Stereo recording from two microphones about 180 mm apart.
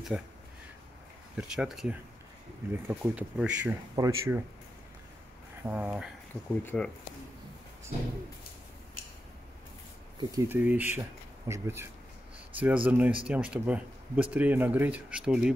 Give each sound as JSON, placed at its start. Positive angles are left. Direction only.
{"t": 0.1, "sound": "speech", "side_deg": -5}
{"t": 1.3, "sound": "speech", "side_deg": -5}
{"t": 3.9, "sound": "speech", "side_deg": -20}
{"t": 5.6, "sound": "speech", "side_deg": -10}
{"t": 6.6, "sound": "speech", "side_deg": 10}
{"t": 10.3, "sound": "speech", "side_deg": -10}